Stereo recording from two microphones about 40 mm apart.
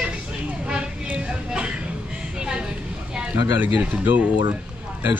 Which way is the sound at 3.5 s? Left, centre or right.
Right.